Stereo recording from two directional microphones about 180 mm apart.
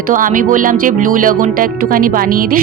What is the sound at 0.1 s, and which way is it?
Speech, 50° right (ahead or behind).